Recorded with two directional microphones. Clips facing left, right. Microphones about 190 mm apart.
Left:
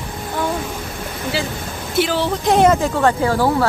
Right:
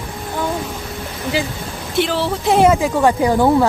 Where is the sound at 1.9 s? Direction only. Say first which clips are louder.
Even; centre (ahead or behind); by 3.6 s 20° right (ahead or behind).